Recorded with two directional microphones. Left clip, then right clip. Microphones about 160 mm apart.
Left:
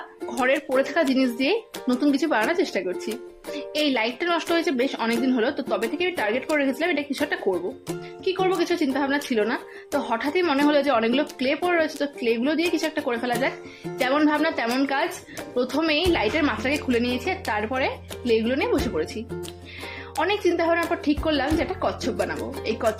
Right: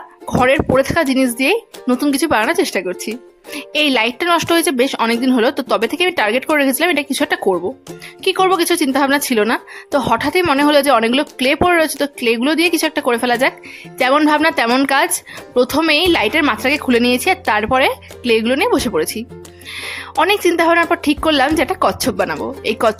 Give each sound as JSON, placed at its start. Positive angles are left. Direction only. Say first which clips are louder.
{"t": 0.3, "sound": "a woman's voice", "louder": "right 9 dB", "side_deg": -35}